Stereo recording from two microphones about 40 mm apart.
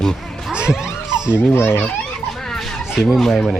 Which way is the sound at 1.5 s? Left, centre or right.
Left.